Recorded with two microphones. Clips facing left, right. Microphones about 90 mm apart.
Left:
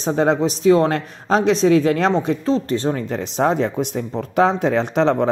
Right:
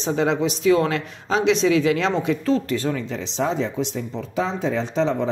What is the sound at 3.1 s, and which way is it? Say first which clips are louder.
Speech: left 5 dB; 55° left (ahead or behind).